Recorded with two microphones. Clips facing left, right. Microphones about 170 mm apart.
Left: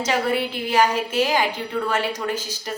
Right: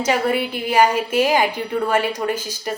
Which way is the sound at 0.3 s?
10° right (ahead or behind).